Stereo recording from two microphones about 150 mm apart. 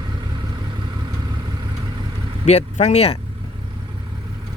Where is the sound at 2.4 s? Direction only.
45° left (ahead or behind).